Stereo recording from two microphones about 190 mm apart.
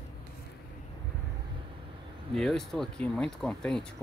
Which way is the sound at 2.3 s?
Centre (ahead or behind).